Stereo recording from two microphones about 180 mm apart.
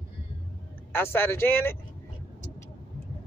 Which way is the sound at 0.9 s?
10° left (ahead or behind).